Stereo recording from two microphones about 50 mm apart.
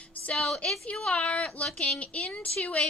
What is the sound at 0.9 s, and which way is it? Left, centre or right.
Speech, left.